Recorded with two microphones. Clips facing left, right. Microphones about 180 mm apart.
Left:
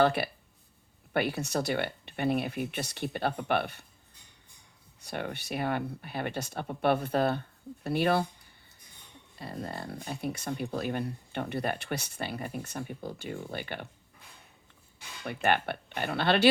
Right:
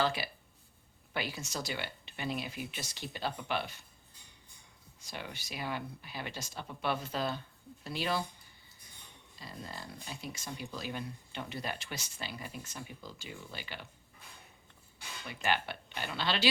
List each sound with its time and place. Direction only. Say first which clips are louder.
0.0 s speech: left 7 dB; 60° left (ahead or behind)
4.9 s speech: left 8 dB; 60° left (ahead or behind)
9.3 s speech: left 8 dB; 60° left (ahead or behind)
15.2 s speech: left 6 dB; 60° left (ahead or behind)